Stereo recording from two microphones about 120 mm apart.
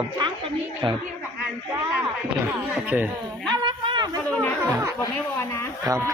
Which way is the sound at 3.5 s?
40° right (ahead or behind).